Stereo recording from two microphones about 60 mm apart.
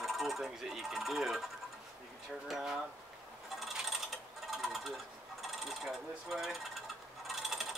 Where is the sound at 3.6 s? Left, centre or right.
Centre.